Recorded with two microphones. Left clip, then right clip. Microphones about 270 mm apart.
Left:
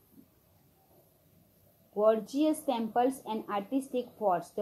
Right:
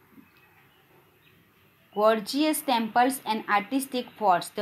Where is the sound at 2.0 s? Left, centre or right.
Right.